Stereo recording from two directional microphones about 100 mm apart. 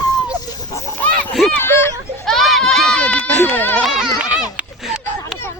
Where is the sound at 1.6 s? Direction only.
25° left (ahead or behind).